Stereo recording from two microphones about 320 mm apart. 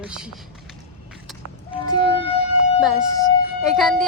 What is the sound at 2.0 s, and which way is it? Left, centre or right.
Speech, centre.